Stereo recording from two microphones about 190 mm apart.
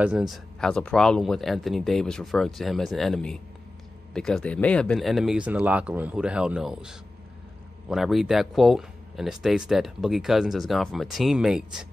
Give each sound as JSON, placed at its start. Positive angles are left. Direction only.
{"t": 0.0, "sound": "speech", "side_deg": -5}